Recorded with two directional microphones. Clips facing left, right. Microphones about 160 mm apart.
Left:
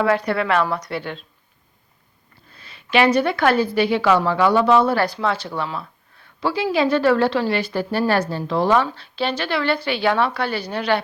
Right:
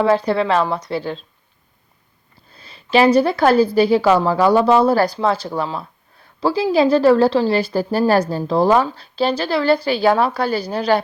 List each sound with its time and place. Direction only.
0.0 s a woman's voice: 30° right (ahead or behind)
2.6 s a woman's voice: 35° right (ahead or behind)